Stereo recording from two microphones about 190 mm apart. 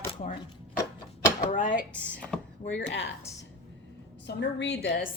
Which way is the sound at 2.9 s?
70° left (ahead or behind).